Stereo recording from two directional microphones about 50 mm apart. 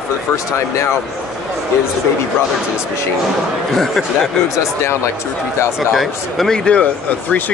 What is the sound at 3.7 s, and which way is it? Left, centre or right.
Speech, centre.